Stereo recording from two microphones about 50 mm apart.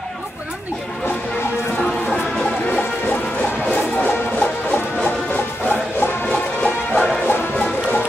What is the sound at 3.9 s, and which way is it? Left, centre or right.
Music, left.